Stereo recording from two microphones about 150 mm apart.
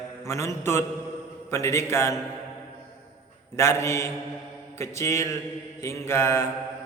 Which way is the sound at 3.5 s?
20° left (ahead or behind).